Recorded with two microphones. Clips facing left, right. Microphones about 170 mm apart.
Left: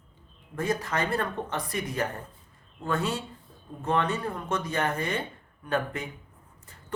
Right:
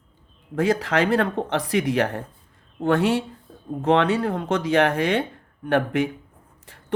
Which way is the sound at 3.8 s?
80° right.